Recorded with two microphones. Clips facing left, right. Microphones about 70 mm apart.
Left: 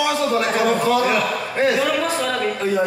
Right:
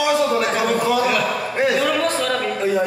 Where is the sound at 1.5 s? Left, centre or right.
Centre.